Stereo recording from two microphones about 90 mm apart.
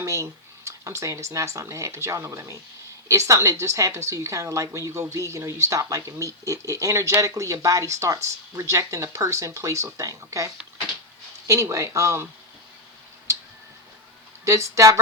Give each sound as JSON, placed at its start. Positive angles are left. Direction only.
{"t": 0.0, "sound": "speech", "side_deg": -35}
{"t": 14.4, "sound": "speech", "side_deg": -35}